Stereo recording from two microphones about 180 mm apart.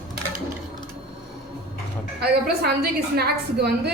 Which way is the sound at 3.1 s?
65° right (ahead or behind).